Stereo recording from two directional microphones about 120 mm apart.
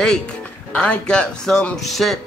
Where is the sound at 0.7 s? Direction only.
10° left (ahead or behind).